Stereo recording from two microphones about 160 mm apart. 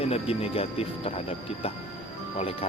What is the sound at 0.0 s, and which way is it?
Speech, 40° left (ahead or behind).